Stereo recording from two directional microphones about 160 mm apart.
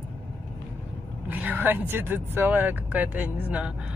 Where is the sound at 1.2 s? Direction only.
10° right (ahead or behind).